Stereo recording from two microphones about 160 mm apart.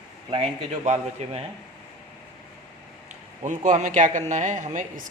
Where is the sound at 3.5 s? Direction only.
50° right (ahead or behind).